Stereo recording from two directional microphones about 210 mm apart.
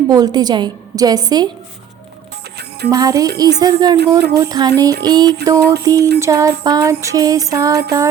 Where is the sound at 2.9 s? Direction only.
15° right (ahead or behind).